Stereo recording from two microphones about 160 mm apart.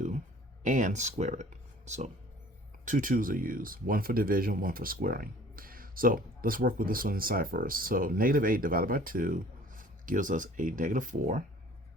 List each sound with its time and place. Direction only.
0.6 s speech: 50° right (ahead or behind)